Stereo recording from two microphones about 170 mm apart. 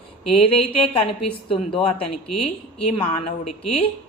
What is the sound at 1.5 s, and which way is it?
A woman's voice, 35° left (ahead or behind).